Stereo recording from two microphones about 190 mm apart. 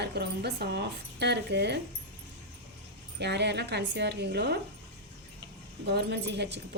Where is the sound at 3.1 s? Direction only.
60° right (ahead or behind).